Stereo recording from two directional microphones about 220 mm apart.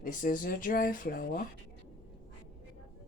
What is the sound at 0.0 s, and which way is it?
Speech, 40° left (ahead or behind).